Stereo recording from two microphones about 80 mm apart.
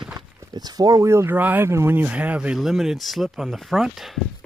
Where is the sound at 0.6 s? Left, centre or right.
Right.